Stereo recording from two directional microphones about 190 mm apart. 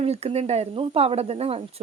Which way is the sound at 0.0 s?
30° right (ahead or behind).